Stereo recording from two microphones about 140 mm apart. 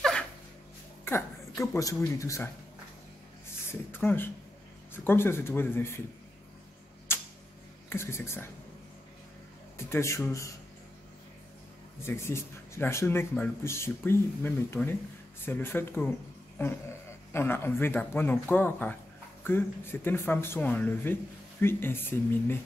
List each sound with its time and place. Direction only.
1.0 s a sound: 20° left (ahead or behind)
2.0 s a man's voice: 20° left (ahead or behind)
3.9 s speech: 15° left (ahead or behind)
7.1 s tick-tock: 15° left (ahead or behind)
7.9 s speech: 20° left (ahead or behind)
9.8 s a man's voice: 20° left (ahead or behind)
12.0 s speech: 20° left (ahead or behind)